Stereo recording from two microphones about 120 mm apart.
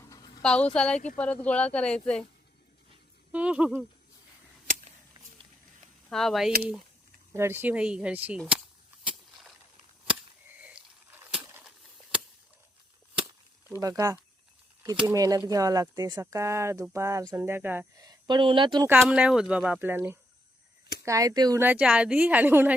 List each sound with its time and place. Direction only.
0.0 s a sound: 30° left (ahead or behind)
0.4 s speech: 10° left (ahead or behind)
3.3 s speech: 10° right (ahead or behind)
6.1 s speech: centre (ahead or behind)
7.3 s speech: 20° right (ahead or behind)
10.6 s a sound: 10° right (ahead or behind)
13.7 s speech: 25° right (ahead or behind)
17.9 s speech: 30° right (ahead or behind)
19.0 s speech: 5° right (ahead or behind)
21.0 s speech: 25° right (ahead or behind)
21.6 s speech: 15° right (ahead or behind)